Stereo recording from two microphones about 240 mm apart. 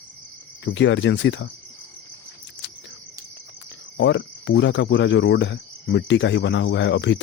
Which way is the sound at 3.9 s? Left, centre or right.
Left.